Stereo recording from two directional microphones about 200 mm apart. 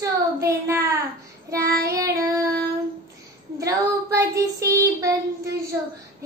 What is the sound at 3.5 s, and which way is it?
Child singing, 15° right (ahead or behind).